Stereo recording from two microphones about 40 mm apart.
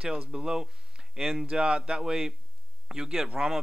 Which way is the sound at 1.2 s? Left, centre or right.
Centre.